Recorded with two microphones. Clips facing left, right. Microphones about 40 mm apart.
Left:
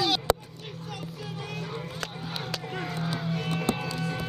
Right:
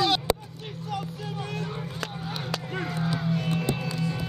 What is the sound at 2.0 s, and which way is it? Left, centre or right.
Music, centre.